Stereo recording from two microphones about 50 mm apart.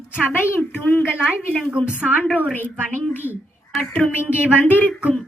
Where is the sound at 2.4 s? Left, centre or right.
Left.